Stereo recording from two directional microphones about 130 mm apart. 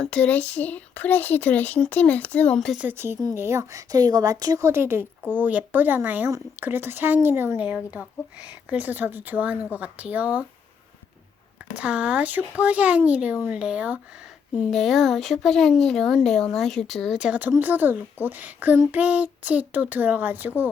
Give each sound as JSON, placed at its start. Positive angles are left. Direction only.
{"t": 0.0, "sound": "speech", "side_deg": 10}
{"t": 2.8, "sound": "speech", "side_deg": -15}
{"t": 11.7, "sound": "speech", "side_deg": -10}
{"t": 14.7, "sound": "speech", "side_deg": 0}